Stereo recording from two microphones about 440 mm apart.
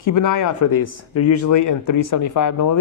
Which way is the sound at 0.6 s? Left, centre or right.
Left.